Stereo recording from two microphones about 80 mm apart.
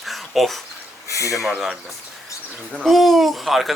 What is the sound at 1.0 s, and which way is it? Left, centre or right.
Speech, left.